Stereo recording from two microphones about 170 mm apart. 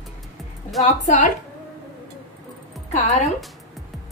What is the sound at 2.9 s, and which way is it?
Speech, 45° left (ahead or behind).